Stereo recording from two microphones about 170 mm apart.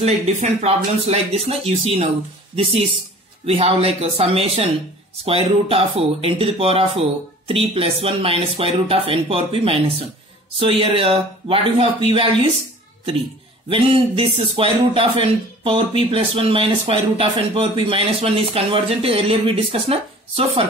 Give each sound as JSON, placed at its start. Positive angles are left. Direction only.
{"t": 0.0, "sound": "speech", "side_deg": -40}
{"t": 13.7, "sound": "speech", "side_deg": -30}